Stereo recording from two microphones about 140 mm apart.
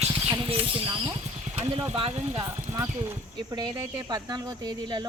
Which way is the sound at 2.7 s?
50° right (ahead or behind).